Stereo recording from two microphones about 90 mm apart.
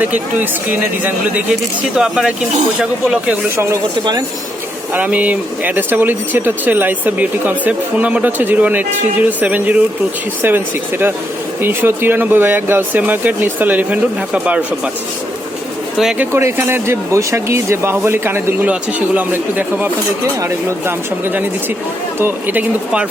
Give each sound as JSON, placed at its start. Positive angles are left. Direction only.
{"t": 0.0, "sound": "speech", "side_deg": -20}
{"t": 4.9, "sound": "speech", "side_deg": -15}
{"t": 16.3, "sound": "speech", "side_deg": -30}